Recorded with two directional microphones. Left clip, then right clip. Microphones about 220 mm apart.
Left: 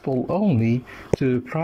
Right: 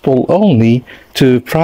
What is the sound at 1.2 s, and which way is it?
Speech, 45° right (ahead or behind).